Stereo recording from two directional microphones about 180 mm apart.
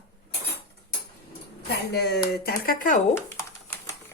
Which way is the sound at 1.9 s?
65° left (ahead or behind).